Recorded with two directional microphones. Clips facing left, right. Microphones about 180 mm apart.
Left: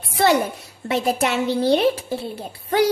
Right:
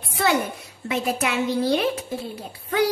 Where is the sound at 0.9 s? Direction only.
30° left (ahead or behind).